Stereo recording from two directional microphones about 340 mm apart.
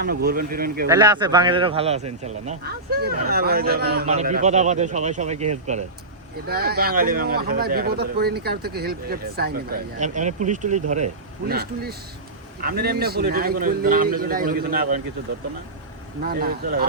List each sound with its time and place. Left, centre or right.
0.0 s speech: right
0.9 s speech: centre
16.2 s speech: right